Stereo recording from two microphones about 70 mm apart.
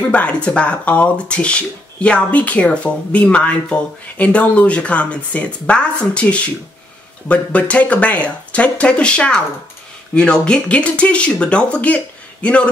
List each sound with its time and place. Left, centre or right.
0.1 s speech: centre